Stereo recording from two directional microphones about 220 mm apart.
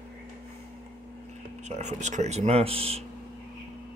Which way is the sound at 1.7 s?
30° right (ahead or behind).